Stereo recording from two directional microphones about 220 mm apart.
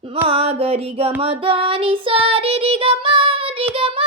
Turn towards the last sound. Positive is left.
turn(degrees=-25)  # may be behind; listen again after turning